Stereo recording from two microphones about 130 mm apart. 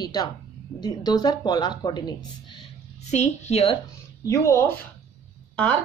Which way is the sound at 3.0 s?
60° left (ahead or behind).